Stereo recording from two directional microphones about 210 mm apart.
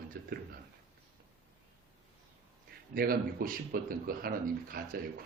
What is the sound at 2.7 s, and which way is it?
A man's voice, 45° right (ahead or behind).